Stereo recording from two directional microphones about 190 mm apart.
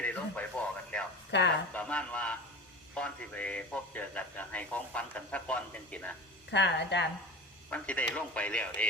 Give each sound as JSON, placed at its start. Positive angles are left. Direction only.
{"t": 0.0, "sound": "radio", "side_deg": 10}
{"t": 0.9, "sound": "a sound", "side_deg": 5}
{"t": 1.3, "sound": "speech", "side_deg": 65}
{"t": 1.7, "sound": "a man's voice", "side_deg": 5}
{"t": 6.5, "sound": "a woman's voice", "side_deg": 65}
{"t": 7.7, "sound": "a man's voice", "side_deg": 5}